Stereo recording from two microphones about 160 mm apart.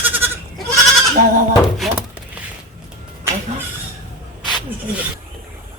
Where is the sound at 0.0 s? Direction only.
10° right (ahead or behind).